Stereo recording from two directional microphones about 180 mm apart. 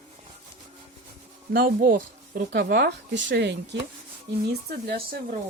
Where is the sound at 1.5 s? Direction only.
55° right (ahead or behind); by 3.8 s 70° right (ahead or behind).